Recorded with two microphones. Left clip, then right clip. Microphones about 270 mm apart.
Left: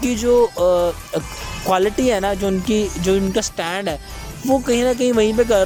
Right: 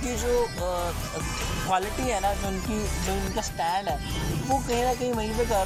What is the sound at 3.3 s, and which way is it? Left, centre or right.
Speech, left.